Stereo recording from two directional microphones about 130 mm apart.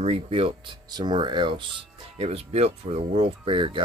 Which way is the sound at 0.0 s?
50° right (ahead or behind).